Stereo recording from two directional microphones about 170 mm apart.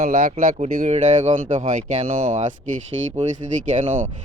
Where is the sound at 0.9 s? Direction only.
45° right (ahead or behind).